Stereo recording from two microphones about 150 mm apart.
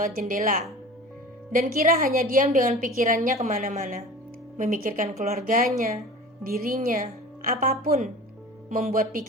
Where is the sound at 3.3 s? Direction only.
50° right (ahead or behind); by 5.1 s 70° right (ahead or behind).